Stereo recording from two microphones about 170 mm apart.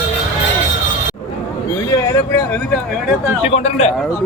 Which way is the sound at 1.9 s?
20° left (ahead or behind).